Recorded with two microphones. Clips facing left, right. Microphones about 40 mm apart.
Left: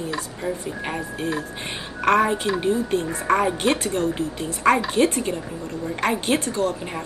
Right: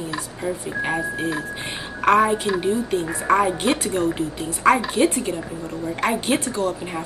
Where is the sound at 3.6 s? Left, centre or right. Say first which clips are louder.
Right 1 dB; centre.